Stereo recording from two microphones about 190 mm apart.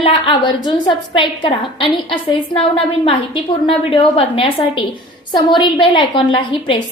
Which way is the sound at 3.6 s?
30° left (ahead or behind).